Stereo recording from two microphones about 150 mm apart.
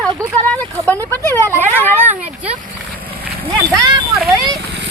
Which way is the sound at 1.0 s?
20° right (ahead or behind).